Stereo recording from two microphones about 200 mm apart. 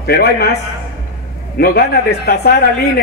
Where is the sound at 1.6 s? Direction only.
50° left (ahead or behind).